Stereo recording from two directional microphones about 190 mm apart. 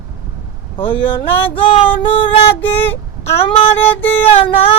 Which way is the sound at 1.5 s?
25° left (ahead or behind).